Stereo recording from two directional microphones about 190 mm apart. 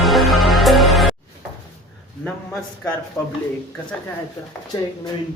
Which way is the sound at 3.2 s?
15° left (ahead or behind).